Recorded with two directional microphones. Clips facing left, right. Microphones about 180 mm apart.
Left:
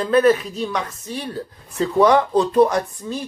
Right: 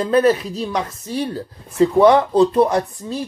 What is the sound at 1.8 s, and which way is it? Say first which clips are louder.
Speech: right 3 dB; 20° right (ahead or behind).